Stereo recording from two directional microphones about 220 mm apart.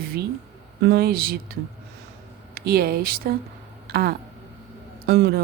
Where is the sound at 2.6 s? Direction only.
45° right (ahead or behind).